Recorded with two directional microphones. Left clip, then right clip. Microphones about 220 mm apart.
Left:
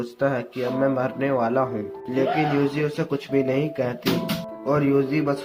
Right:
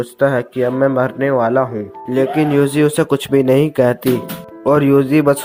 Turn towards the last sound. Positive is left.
turn(degrees=-40)  # may be behind; listen again after turning